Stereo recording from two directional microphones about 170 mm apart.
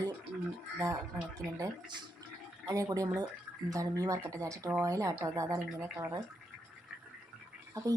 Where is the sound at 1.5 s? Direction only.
20° right (ahead or behind).